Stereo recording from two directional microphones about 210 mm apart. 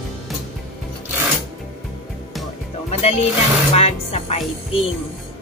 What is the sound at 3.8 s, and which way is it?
A woman's voice, 30° left (ahead or behind).